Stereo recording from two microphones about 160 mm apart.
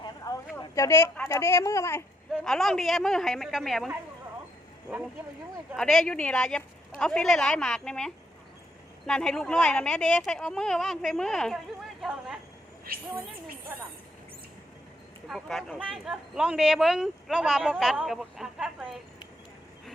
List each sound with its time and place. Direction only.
0.6 s a woman's voice: 20° left (ahead or behind)
2.4 s speech: centre (ahead or behind)
5.7 s speech: centre (ahead or behind)
15.3 s speech: centre (ahead or behind)